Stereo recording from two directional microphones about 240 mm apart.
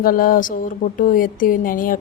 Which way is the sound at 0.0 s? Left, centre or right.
Left.